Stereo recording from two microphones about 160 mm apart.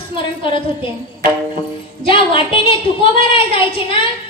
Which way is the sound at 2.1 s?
35° left (ahead or behind).